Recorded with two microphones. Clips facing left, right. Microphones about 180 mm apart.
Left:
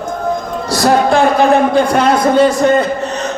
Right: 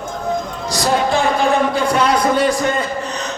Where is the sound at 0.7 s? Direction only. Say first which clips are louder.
Left 6 dB; 60° left (ahead or behind).